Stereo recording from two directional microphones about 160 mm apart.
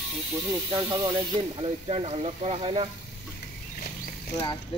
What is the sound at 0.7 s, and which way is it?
Speech, 30° right (ahead or behind).